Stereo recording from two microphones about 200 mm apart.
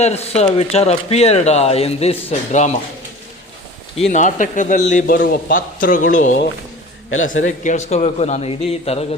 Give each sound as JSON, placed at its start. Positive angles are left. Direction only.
{"t": 0.0, "sound": "speech", "side_deg": 30}
{"t": 3.9, "sound": "speech", "side_deg": 35}
{"t": 7.4, "sound": "speech", "side_deg": 40}